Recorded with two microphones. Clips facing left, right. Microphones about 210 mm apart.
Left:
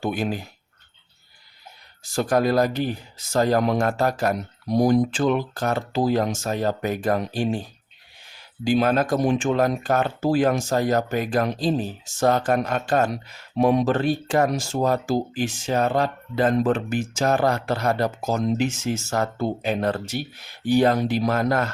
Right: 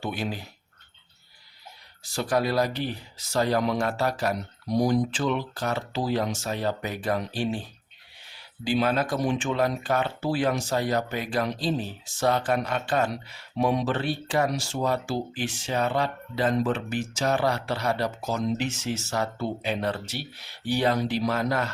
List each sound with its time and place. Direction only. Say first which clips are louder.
0.0 s speech: left 6 dB; 45° left (ahead or behind)
2.1 s speech: left 5 dB; 45° left (ahead or behind)